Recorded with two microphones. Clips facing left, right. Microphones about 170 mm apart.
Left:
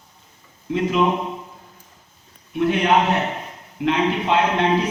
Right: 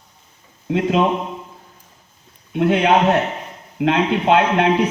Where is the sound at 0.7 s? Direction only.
70° right (ahead or behind).